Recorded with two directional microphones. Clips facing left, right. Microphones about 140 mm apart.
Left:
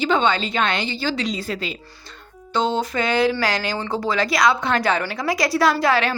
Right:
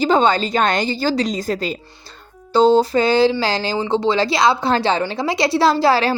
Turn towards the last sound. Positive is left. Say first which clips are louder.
# right 3 dB
turn(degrees=-35)  # may be behind; listen again after turning